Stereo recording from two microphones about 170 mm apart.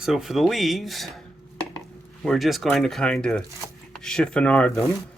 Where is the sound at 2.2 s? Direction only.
Centre (ahead or behind).